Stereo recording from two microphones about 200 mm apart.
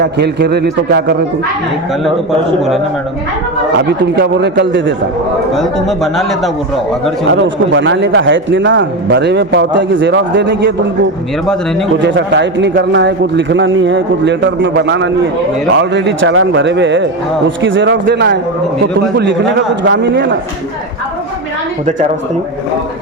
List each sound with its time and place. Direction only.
0.0 s a man's voice: 55° right (ahead or behind)
3.8 s a man's voice: 55° right (ahead or behind)
5.5 s speech: centre (ahead or behind)
7.3 s a man's voice: 65° right (ahead or behind)
12.0 s a man's voice: 60° right (ahead or behind)